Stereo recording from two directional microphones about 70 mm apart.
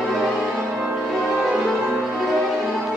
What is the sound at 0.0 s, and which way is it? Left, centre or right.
Music, centre.